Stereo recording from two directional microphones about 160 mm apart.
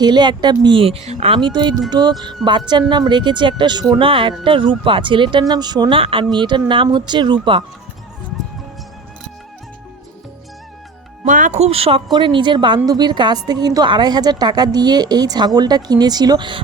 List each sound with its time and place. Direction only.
0.0 s a woman's voice: 25° right (ahead or behind)
11.3 s a woman's voice: 55° right (ahead or behind); by 16.6 s 25° right (ahead or behind)